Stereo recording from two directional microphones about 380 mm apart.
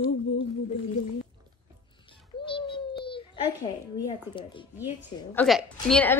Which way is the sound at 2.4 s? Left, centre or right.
Centre.